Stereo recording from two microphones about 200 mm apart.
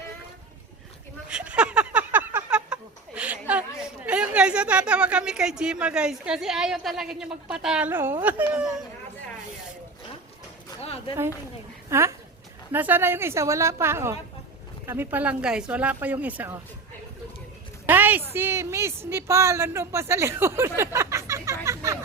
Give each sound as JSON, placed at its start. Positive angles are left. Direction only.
{"t": 1.3, "sound": "music", "side_deg": -5}
{"t": 3.2, "sound": "a sound", "side_deg": -5}
{"t": 3.8, "sound": "a woman's voice", "side_deg": -5}
{"t": 10.8, "sound": "a sound", "side_deg": 30}
{"t": 11.9, "sound": "speech", "side_deg": -15}
{"t": 17.8, "sound": "a woman's voice", "side_deg": -10}